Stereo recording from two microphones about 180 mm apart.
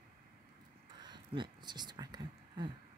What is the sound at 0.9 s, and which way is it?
Speech, 25° right (ahead or behind).